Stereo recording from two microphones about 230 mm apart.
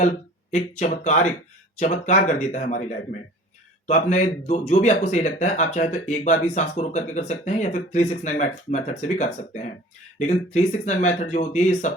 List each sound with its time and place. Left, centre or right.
0.5 s speech: left